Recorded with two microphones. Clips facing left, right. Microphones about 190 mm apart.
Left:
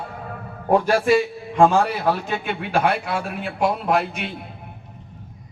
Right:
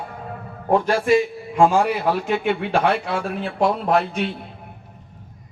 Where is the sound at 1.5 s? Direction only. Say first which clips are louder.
Even; 10° right (ahead or behind).